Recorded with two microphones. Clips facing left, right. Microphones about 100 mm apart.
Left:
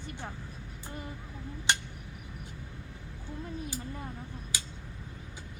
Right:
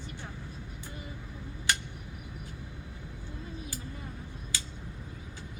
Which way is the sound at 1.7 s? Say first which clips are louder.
Left 2 dB; 20° left (ahead or behind).